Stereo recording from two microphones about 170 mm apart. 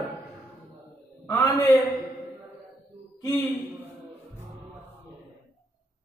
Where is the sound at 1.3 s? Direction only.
20° left (ahead or behind).